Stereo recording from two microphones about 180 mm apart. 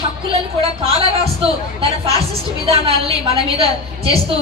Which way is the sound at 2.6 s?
35° right (ahead or behind).